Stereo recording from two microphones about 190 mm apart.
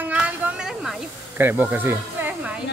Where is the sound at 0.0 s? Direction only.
10° right (ahead or behind).